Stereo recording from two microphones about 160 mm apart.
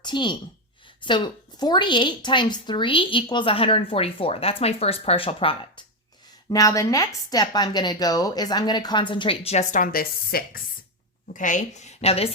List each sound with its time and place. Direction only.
0.0 s a woman's voice: 30° left (ahead or behind)
6.5 s speech: 20° left (ahead or behind); by 10.6 s 70° left (ahead or behind)
11.3 s a woman's voice: 50° left (ahead or behind)